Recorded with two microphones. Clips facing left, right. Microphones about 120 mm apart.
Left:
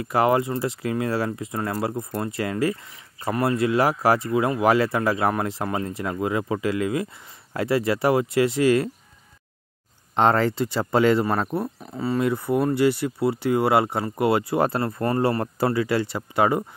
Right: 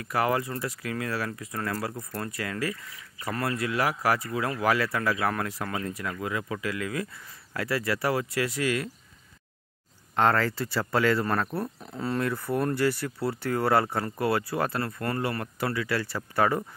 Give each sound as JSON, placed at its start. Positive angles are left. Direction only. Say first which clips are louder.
{"t": 0.0, "sound": "speech", "louder": "left 6 dB", "side_deg": 25}
{"t": 10.1, "sound": "speech", "louder": "left 4 dB", "side_deg": 25}
{"t": 11.5, "sound": "speech", "louder": "left 5 dB", "side_deg": 5}
{"t": 12.3, "sound": "speech", "louder": "left 6 dB", "side_deg": 15}